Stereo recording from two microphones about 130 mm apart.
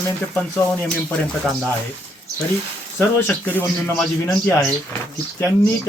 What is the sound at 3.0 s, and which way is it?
A man's voice, 15° left (ahead or behind).